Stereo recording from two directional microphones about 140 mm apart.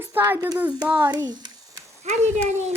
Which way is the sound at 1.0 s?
30° right (ahead or behind).